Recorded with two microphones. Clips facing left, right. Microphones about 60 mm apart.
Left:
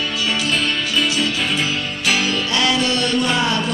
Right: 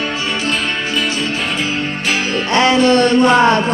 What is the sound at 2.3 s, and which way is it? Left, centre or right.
Music, right.